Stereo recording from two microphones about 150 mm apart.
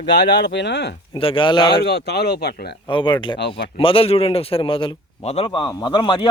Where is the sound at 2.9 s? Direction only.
30° left (ahead or behind).